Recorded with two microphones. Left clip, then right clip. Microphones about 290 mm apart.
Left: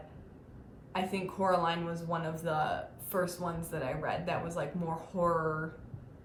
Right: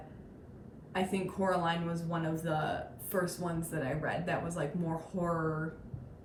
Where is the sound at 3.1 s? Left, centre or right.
Centre.